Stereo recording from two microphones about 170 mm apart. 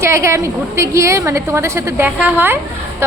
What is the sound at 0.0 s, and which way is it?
A woman's voice, 15° right (ahead or behind).